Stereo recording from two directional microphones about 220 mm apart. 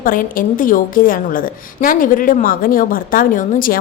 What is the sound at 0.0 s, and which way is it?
A woman's voice, 40° left (ahead or behind).